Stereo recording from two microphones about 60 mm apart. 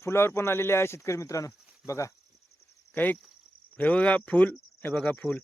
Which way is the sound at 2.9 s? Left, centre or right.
Left.